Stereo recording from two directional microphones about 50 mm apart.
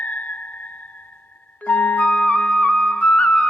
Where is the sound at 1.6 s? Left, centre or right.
Left.